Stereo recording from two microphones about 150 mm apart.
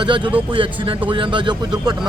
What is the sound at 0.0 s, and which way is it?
Speech, 35° right (ahead or behind).